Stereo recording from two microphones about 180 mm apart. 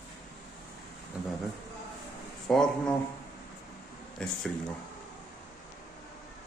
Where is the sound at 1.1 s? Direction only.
5° right (ahead or behind).